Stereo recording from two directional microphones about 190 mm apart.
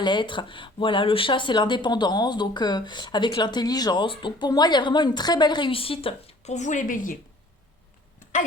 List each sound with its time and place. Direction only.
0.0 s speech: 25° left (ahead or behind); by 7.2 s 45° left (ahead or behind)